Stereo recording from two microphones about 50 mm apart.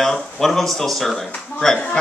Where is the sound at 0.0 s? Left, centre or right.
Centre.